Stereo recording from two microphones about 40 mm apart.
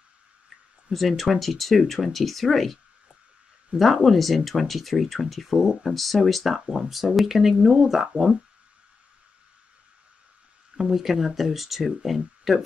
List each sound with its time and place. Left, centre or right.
0.9 s speech: centre
6.6 s speech: centre
7.2 s speech: centre
7.6 s speech: centre
10.8 s a sound: centre
11.1 s speech: centre